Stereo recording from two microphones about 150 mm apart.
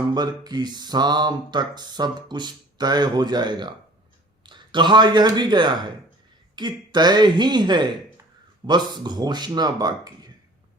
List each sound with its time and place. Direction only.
0.1 s speech: 25° right (ahead or behind)